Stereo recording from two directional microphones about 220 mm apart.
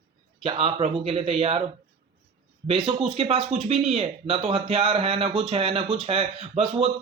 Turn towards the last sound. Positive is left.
turn(degrees=-25)  # may be behind; listen again after turning